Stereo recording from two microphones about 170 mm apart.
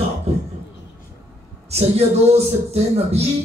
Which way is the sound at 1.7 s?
35° right (ahead or behind).